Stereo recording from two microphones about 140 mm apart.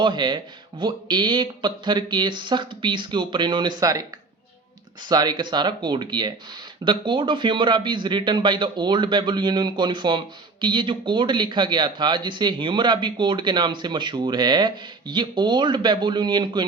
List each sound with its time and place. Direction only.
0.0 s a man's voice: 35° right (ahead or behind)
5.0 s a man's voice: 30° right (ahead or behind)